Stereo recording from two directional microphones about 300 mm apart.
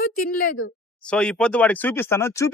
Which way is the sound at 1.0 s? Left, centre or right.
Centre.